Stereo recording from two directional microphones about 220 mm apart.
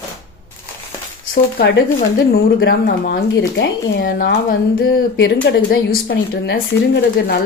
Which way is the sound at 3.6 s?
45° left (ahead or behind).